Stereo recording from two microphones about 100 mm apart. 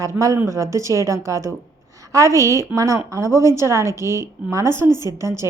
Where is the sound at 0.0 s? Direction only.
35° right (ahead or behind).